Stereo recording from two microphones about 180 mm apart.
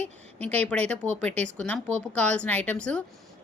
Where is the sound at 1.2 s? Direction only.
5° left (ahead or behind).